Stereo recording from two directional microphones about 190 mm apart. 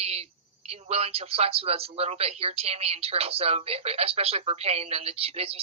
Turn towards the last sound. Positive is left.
turn(degrees=-30)  # may be behind; listen again after turning